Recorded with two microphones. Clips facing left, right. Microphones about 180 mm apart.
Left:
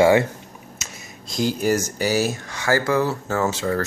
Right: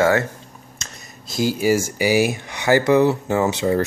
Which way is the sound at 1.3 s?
5° right (ahead or behind).